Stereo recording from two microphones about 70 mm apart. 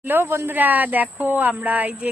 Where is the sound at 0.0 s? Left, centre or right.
Right.